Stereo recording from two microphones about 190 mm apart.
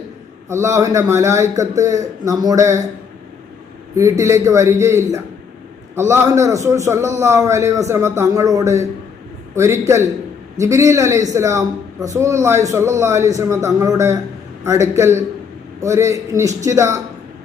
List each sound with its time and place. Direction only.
0.4 s a man's voice: 15° right (ahead or behind)
3.9 s a man's voice: 15° right (ahead or behind)